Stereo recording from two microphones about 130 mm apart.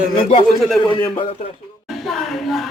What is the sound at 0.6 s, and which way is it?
Speech, centre (ahead or behind).